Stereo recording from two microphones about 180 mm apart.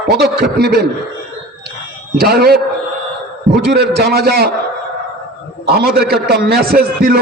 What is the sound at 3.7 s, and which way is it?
Speech, 60° right (ahead or behind).